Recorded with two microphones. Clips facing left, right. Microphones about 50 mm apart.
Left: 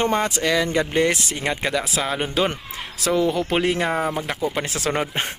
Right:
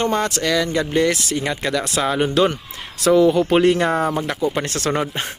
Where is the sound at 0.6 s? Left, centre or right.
Left.